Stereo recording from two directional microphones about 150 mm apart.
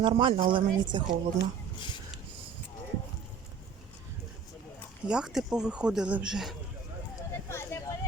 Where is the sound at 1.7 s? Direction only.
30° left (ahead or behind).